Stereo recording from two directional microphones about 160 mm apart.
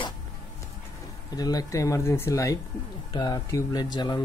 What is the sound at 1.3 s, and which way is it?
Speech, 25° left (ahead or behind).